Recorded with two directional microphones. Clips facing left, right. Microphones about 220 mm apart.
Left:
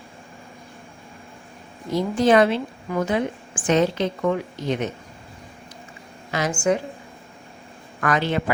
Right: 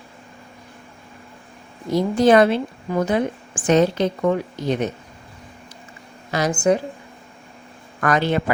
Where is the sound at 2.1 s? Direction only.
40° right (ahead or behind).